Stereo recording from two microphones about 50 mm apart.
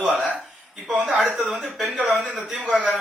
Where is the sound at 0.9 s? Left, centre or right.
Right.